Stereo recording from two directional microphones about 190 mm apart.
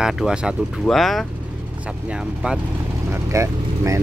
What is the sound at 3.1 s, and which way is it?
Speech, 15° right (ahead or behind).